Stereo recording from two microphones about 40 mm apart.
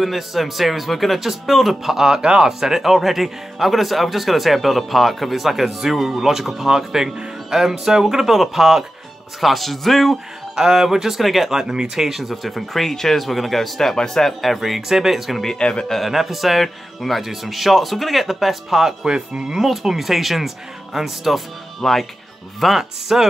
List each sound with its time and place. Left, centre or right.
0.0 s speech: centre
10.5 s speech: centre
12.1 s speech: centre
14.4 s speech: centre
15.4 s a man's voice: left
15.9 s speech: centre
19.0 s speech: right
19.5 s speech: centre
21.8 s speech: centre
22.6 s speech: centre